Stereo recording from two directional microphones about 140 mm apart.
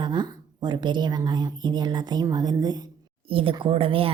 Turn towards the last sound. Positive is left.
turn(degrees=-40)  # may be behind; listen again after turning